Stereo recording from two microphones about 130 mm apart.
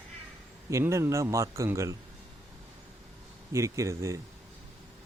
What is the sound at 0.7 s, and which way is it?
A man's voice, 25° right (ahead or behind).